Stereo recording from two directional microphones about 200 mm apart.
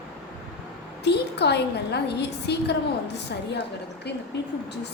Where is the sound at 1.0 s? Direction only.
55° left (ahead or behind).